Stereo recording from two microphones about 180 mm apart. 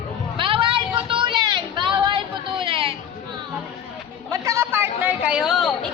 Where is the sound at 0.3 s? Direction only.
30° right (ahead or behind).